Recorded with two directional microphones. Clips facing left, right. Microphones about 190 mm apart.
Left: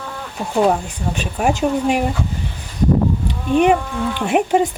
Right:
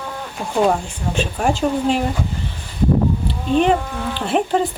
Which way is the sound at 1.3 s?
10° left (ahead or behind).